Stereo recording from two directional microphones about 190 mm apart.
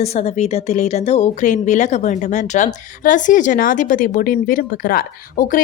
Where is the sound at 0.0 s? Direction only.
35° left (ahead or behind).